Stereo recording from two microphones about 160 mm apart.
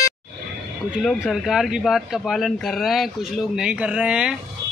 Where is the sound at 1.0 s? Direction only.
Centre (ahead or behind).